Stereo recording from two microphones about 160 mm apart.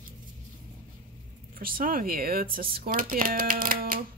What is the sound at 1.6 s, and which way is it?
Speech, 65° right (ahead or behind).